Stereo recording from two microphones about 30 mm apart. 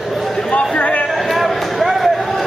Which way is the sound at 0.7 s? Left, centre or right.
Left.